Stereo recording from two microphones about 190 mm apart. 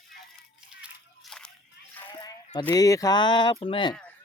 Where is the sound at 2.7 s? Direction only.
20° left (ahead or behind).